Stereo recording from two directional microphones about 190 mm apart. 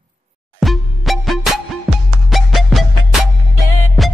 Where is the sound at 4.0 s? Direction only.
Centre (ahead or behind).